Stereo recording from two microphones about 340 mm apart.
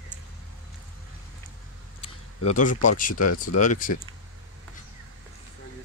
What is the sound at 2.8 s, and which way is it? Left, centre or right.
Speech, left.